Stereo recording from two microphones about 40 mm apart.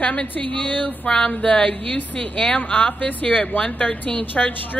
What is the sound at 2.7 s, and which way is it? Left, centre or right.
A woman's voice, left.